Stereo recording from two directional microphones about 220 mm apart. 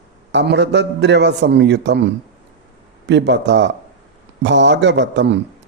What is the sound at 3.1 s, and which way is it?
A man's voice, 50° right (ahead or behind).